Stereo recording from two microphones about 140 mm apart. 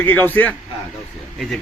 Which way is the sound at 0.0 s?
15° left (ahead or behind).